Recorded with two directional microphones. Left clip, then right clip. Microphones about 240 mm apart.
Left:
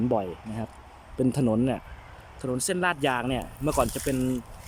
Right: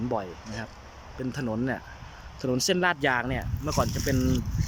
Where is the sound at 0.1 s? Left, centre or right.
Centre.